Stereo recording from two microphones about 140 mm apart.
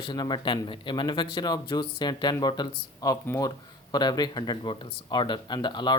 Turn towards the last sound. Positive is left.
turn(degrees=35)  # may be behind; listen again after turning